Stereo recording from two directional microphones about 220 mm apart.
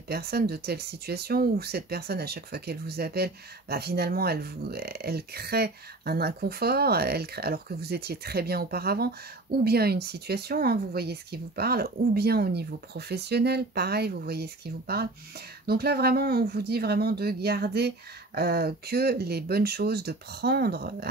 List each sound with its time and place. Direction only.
0.1 s speech: 45° right (ahead or behind)